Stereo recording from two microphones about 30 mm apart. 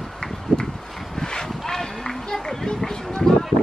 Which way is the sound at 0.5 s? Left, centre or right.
Left.